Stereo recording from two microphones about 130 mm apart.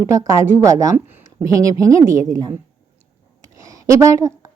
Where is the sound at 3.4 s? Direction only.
25° right (ahead or behind).